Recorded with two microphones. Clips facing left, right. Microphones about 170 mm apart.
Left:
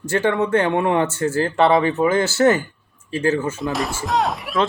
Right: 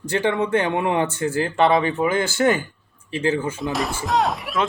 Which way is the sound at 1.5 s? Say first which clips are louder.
Left 2 dB; 35° left (ahead or behind).